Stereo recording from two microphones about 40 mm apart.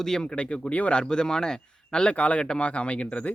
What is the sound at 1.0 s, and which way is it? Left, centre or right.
Speech, centre.